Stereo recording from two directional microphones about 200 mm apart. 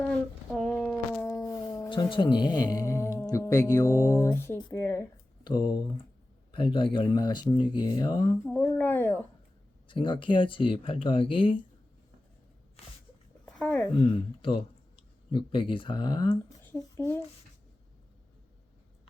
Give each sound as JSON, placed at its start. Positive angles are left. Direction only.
{"t": 0.0, "sound": "a sound", "side_deg": 5}
{"t": 4.7, "sound": "speech", "side_deg": 15}
{"t": 8.4, "sound": "speech", "side_deg": 10}
{"t": 9.9, "sound": "speech", "side_deg": 25}
{"t": 13.4, "sound": "a sound", "side_deg": 5}
{"t": 13.9, "sound": "speech", "side_deg": 25}